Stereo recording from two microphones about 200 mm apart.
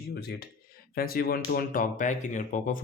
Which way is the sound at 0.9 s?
50° left (ahead or behind).